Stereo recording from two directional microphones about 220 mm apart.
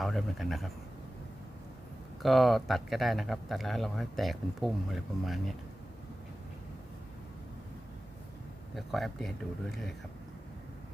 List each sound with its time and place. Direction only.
0.0 s speech: centre (ahead or behind)
2.2 s speech: centre (ahead or behind)
8.7 s speech: centre (ahead or behind)